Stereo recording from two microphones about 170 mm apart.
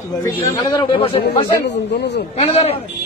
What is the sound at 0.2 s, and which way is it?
Speech, 25° left (ahead or behind).